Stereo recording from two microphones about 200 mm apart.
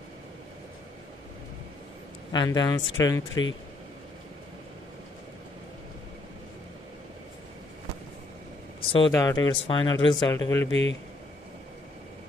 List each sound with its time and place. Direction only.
2.3 s speech: 20° left (ahead or behind)
8.8 s a sound: 25° left (ahead or behind)
9.1 s speech: 20° left (ahead or behind)
10.7 s speech: 65° left (ahead or behind)